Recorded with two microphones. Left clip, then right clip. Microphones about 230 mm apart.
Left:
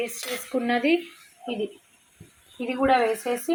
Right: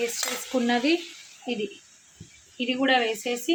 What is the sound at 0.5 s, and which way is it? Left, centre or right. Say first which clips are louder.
Frying: left 1 dB; centre.